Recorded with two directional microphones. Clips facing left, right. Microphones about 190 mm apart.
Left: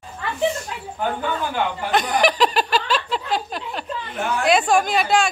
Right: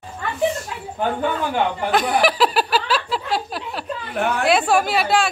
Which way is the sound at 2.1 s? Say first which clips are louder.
Left 1 dB; 5° right (ahead or behind).